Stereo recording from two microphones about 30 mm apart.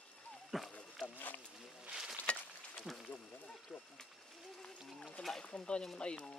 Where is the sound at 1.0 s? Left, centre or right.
Left.